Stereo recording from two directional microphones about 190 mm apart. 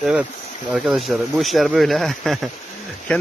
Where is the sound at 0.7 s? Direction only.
Centre (ahead or behind).